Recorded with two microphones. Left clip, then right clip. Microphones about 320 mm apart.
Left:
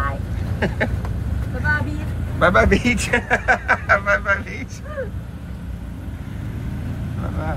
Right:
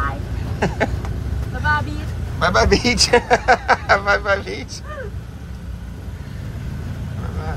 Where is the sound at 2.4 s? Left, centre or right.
Centre.